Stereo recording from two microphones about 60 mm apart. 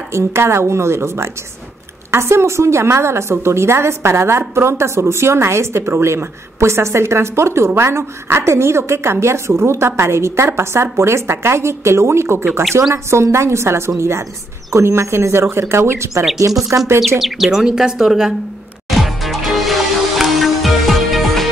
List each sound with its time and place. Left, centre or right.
0.1 s a woman's voice: right
16.3 s speech: right
17.2 s speech: centre
18.9 s music: centre